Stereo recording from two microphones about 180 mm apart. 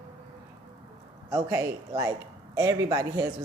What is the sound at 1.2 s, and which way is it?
A woman's voice, 20° right (ahead or behind).